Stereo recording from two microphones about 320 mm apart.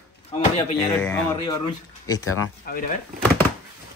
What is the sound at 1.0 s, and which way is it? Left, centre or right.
Speech, centre.